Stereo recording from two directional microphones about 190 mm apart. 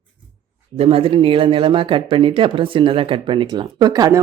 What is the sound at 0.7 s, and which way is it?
Speech, 30° right (ahead or behind).